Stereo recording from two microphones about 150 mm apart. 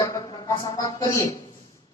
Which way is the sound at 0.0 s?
20° left (ahead or behind).